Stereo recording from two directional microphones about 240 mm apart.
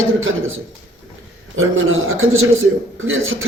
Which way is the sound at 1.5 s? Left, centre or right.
Right.